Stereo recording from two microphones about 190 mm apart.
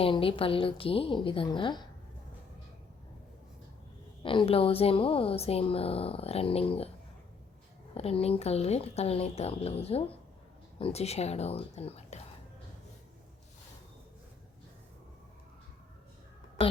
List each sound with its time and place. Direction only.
0.0 s a woman's voice: 30° left (ahead or behind)
4.2 s a woman's voice: 25° left (ahead or behind)
7.9 s a woman's voice: 30° left (ahead or behind)